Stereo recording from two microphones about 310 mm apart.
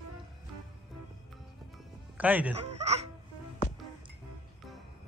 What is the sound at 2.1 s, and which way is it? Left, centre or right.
Speech, centre.